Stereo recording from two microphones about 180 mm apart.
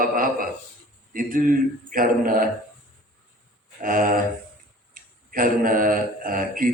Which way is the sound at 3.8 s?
50° right (ahead or behind).